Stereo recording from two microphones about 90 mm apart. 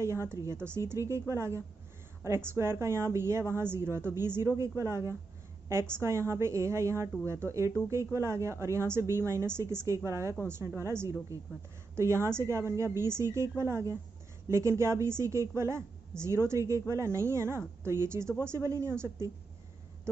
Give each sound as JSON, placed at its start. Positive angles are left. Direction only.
{"t": 0.0, "sound": "a woman's voice", "side_deg": -30}